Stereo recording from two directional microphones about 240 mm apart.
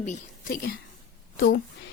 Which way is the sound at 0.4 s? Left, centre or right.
Left.